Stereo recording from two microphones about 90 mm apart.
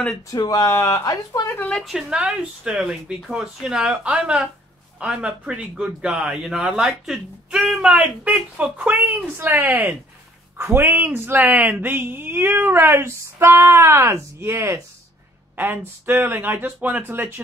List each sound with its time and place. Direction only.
0.3 s speech: 45° left (ahead or behind)
1.6 s a woman's voice: 10° left (ahead or behind)
1.9 s speech: 5° right (ahead or behind); by 17.4 s 25° right (ahead or behind)